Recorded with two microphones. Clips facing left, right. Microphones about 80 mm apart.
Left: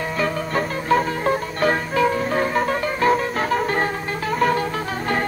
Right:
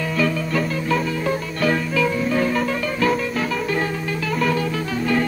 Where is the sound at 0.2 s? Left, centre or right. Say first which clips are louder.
Right 1 dB; left.